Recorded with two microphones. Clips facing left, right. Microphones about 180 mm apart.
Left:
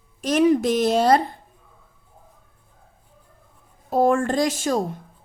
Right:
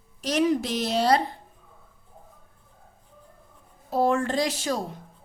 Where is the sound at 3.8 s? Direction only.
50° left (ahead or behind).